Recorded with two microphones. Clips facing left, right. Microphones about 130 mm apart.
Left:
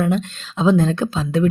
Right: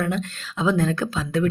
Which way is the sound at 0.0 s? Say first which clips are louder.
Left 5 dB; 20° left (ahead or behind).